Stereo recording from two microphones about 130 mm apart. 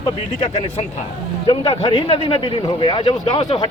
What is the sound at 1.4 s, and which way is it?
Speech, 35° left (ahead or behind).